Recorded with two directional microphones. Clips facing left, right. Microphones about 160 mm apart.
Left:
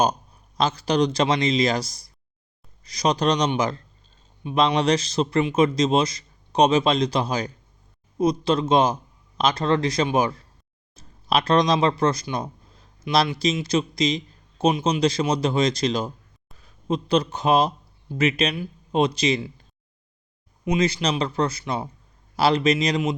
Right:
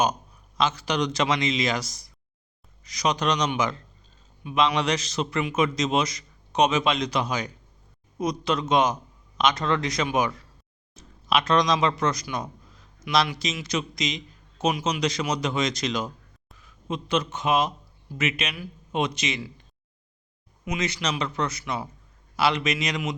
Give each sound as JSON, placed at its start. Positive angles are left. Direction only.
{"t": 0.0, "sound": "a man's voice", "side_deg": 35}
{"t": 20.7, "sound": "a man's voice", "side_deg": 30}